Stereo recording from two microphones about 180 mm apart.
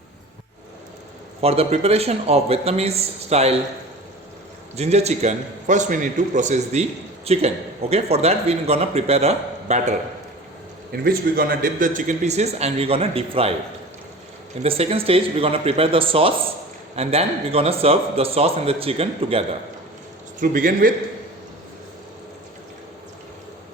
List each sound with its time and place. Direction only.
1.4 s a man's voice: 35° right (ahead or behind)
4.8 s a man's voice: 35° right (ahead or behind)
10.9 s a man's voice: 55° right (ahead or behind); by 13.5 s 30° right (ahead or behind)
14.6 s a man's voice: 35° right (ahead or behind)
20.4 s a man's voice: 50° right (ahead or behind)